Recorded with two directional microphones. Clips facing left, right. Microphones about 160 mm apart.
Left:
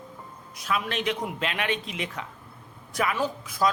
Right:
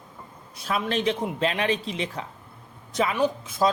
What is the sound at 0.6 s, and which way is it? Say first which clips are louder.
A man's voice: right 3 dB; 30° right (ahead or behind).